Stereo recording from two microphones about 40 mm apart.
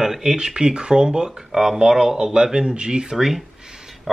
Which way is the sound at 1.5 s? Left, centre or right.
Centre.